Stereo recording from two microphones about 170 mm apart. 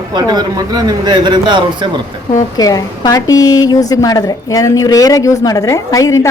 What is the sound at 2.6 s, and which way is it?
A woman's voice, 20° left (ahead or behind).